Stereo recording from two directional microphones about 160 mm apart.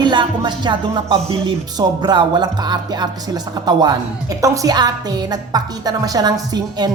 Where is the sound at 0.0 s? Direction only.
30° right (ahead or behind).